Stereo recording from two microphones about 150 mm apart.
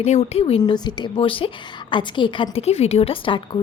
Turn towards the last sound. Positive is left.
turn(degrees=35)  # may be behind; listen again after turning